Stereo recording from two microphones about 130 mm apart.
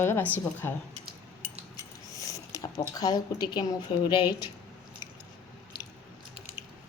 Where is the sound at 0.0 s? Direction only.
15° left (ahead or behind).